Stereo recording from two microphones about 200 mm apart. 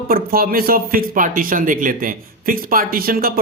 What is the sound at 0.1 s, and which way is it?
A man's voice, 45° right (ahead or behind).